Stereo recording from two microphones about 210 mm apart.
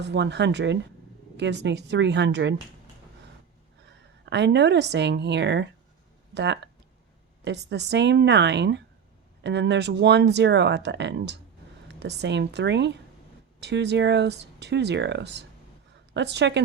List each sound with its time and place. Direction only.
0.0 s speech: 55° right (ahead or behind)
4.3 s speech: 55° right (ahead or behind)